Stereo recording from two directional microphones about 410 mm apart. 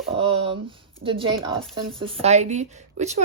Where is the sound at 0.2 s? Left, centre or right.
Centre.